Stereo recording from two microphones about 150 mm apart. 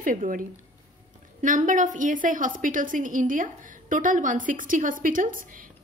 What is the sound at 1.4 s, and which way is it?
A woman's voice, 60° right (ahead or behind).